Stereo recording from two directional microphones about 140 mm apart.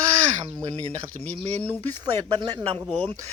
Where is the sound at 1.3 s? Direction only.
45° right (ahead or behind).